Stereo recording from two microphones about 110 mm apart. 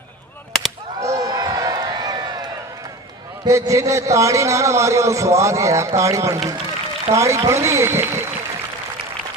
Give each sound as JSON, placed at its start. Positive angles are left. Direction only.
{"t": 1.0, "sound": "run", "side_deg": -30}
{"t": 3.4, "sound": "a man's voice", "side_deg": -30}